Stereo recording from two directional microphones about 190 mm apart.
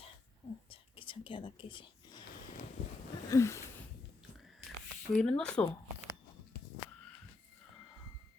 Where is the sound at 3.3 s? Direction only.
15° left (ahead or behind).